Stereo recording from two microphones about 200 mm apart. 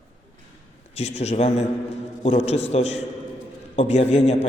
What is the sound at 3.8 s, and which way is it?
Speech, 35° left (ahead or behind).